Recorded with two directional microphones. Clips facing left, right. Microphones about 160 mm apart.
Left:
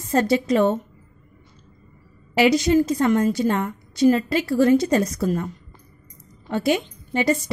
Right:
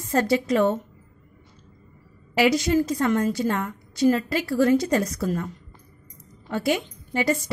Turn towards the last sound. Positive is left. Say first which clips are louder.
# left 3 dB
turn(degrees=25)  # may be behind; listen again after turning